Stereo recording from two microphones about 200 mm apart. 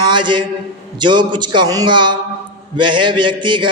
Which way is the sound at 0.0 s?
25° right (ahead or behind).